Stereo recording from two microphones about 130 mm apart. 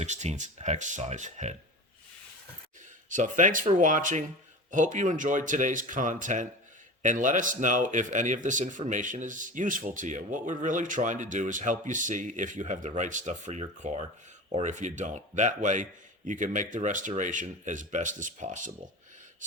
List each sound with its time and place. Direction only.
0.0 s speech: 65° right (ahead or behind)
3.1 s speech: 80° right